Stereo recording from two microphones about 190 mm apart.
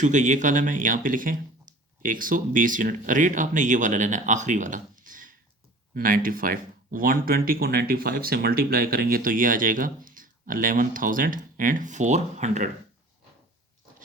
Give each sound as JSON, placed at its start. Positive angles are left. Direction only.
{"t": 0.0, "sound": "speech", "side_deg": -40}